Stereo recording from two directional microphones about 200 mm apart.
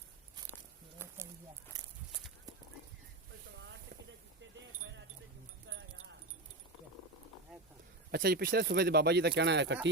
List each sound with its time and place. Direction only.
0.9 s a sound: 10° right (ahead or behind)
1.7 s walk: 20° right (ahead or behind)
5.6 s keys jangling: 75° right (ahead or behind)
8.1 s speech: 50° right (ahead or behind)